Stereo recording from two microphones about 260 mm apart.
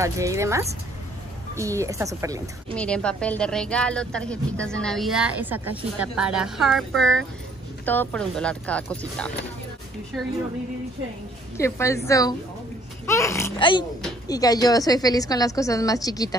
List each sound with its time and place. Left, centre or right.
0.0 s a woman's voice: centre
2.7 s a woman's voice: centre
11.5 s a woman's voice: centre